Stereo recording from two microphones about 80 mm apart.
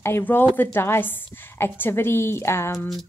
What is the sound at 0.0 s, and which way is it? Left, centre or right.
A woman's voice, left.